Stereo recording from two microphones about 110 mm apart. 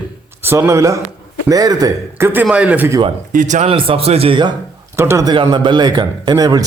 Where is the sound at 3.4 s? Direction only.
90° right.